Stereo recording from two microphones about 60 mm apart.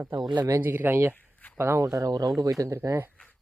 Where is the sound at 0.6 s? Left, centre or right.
Right.